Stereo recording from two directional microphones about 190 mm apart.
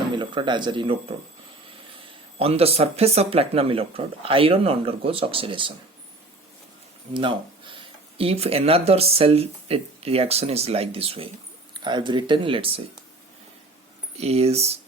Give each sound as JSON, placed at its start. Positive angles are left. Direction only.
{"t": 0.2, "sound": "speech", "side_deg": -25}
{"t": 2.4, "sound": "speech", "side_deg": -30}
{"t": 7.1, "sound": "speech", "side_deg": -25}
{"t": 14.2, "sound": "speech", "side_deg": -30}